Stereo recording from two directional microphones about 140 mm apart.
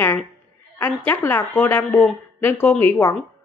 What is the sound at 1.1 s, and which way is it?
A woman's voice, 15° left (ahead or behind).